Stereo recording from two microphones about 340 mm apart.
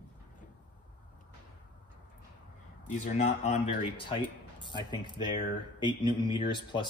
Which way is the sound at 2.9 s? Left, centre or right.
Left.